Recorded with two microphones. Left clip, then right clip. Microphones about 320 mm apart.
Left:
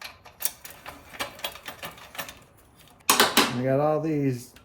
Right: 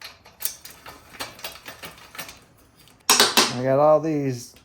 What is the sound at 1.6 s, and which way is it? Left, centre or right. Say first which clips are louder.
Sewing machine: left 1 dB; centre.